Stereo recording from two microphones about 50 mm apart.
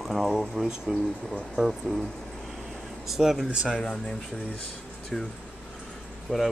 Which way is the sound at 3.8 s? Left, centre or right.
Centre.